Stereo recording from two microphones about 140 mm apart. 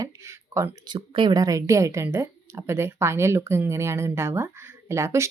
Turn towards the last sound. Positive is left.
turn(degrees=-20)  # may be behind; listen again after turning